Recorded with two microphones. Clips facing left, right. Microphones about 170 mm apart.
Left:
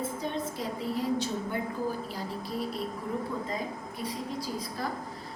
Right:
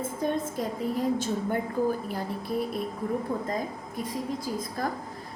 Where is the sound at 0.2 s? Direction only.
50° right (ahead or behind).